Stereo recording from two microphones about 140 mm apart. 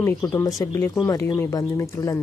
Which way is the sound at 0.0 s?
20° left (ahead or behind).